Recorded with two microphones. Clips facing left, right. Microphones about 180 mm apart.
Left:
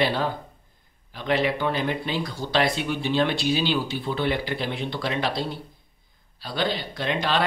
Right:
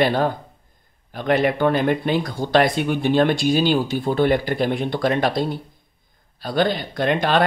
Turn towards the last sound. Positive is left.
turn(degrees=-50)  # may be behind; listen again after turning